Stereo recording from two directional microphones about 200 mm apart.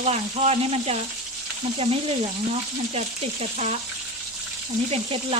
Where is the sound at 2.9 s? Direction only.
35° right (ahead or behind).